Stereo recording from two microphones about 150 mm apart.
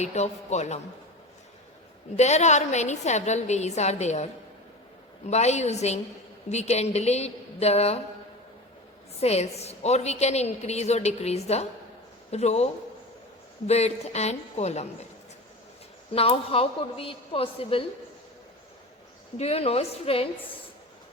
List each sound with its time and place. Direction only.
0.0 s a woman's voice: 50° left (ahead or behind)
2.1 s a woman's voice: 50° left (ahead or behind)
9.1 s a woman's voice: 45° left (ahead or behind)
13.7 s a woman's voice: 45° left (ahead or behind)
16.1 s a woman's voice: 40° left (ahead or behind)
19.4 s a woman's voice: 45° left (ahead or behind)